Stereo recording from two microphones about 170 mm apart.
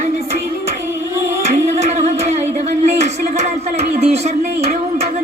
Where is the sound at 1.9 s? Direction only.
40° right (ahead or behind).